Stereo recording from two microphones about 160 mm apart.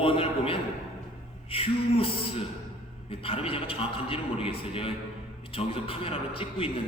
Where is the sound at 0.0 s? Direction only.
35° left (ahead or behind).